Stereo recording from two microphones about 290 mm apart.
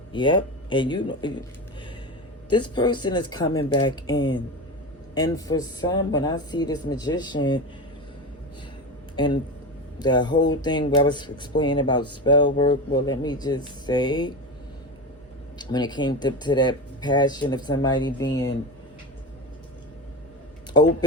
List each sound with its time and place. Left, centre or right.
0.1 s speech: centre
2.5 s speech: centre
9.1 s a man's voice: centre
15.5 s speech: centre